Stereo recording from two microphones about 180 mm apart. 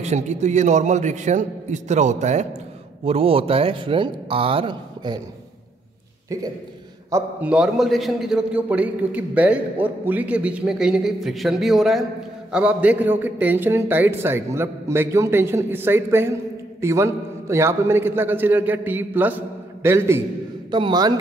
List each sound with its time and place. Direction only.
0.0 s a man's voice: 40° right (ahead or behind)
7.1 s a man's voice: 15° right (ahead or behind)
7.5 s a man's voice: 5° right (ahead or behind)
20.7 s a man's voice: 25° right (ahead or behind)